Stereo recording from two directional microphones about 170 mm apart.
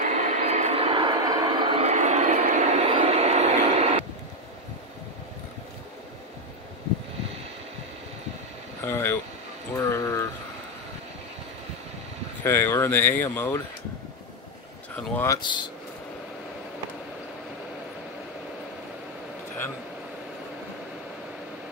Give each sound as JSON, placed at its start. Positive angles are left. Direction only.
{"t": 0.0, "sound": "vehicle", "side_deg": -45}
{"t": 8.8, "sound": "a sound", "side_deg": 15}
{"t": 12.4, "sound": "speech", "side_deg": 15}
{"t": 15.0, "sound": "speech", "side_deg": 5}
{"t": 15.2, "sound": "speech", "side_deg": 25}